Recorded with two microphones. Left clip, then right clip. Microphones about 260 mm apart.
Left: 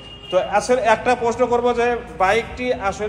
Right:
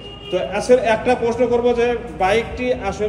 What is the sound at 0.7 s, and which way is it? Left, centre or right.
Speech, left.